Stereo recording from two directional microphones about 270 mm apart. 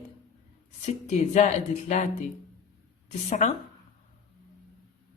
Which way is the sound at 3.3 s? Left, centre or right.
Left.